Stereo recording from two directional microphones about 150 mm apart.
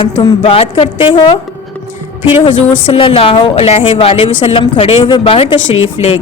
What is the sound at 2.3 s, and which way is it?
Speech, 35° left (ahead or behind).